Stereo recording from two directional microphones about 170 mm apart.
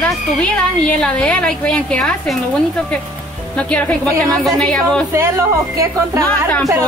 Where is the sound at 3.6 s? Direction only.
5° left (ahead or behind).